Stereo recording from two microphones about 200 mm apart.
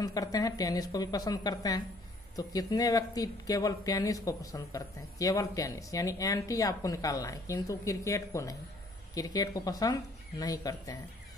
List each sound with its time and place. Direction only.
0.0 s speech: 20° left (ahead or behind)